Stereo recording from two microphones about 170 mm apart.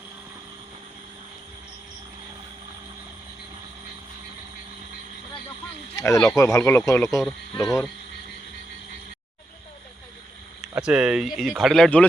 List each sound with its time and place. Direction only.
6.0 s speech: 20° left (ahead or behind)
10.8 s speech: 5° right (ahead or behind)